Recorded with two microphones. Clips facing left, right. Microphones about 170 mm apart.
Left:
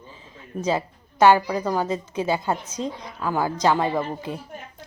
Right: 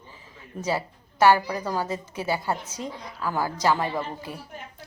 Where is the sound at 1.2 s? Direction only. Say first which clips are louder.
Left 3 dB; 20° left (ahead or behind).